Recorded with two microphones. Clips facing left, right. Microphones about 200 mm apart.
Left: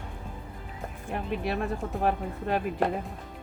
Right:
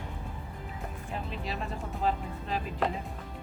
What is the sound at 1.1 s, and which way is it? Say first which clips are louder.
Speech: left 7 dB; 60° left (ahead or behind).